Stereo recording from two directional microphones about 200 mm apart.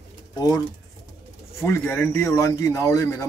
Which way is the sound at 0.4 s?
20° left (ahead or behind).